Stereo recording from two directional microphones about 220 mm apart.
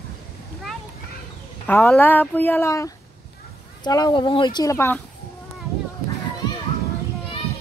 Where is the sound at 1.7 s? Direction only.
10° left (ahead or behind).